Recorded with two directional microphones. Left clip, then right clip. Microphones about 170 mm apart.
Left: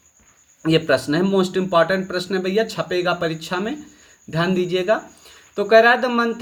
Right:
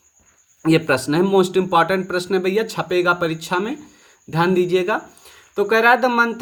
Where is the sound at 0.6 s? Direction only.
40° right (ahead or behind).